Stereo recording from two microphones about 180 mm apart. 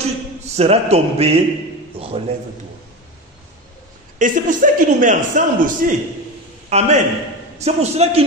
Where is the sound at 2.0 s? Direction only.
30° right (ahead or behind).